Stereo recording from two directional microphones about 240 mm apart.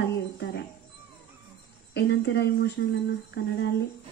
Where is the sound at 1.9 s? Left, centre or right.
Left.